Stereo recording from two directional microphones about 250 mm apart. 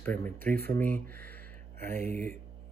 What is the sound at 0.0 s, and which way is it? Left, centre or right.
Speech, centre.